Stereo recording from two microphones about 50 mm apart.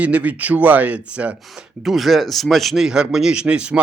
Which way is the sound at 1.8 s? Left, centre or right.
Centre.